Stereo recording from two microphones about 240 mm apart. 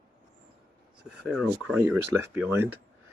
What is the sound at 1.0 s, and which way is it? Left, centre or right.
Speech, centre.